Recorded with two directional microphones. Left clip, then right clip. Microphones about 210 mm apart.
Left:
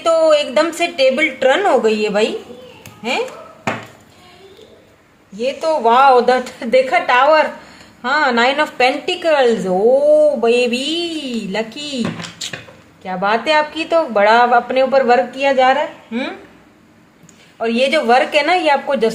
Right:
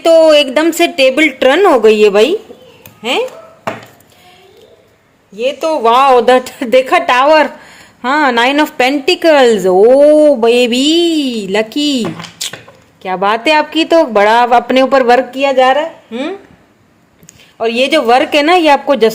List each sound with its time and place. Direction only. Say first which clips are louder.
0.0 s a woman's voice: right 6 dB; 45° right (ahead or behind)
5.4 s a woman's voice: right 4 dB; 45° right (ahead or behind)
17.6 s a woman's voice: right 4 dB; 40° right (ahead or behind)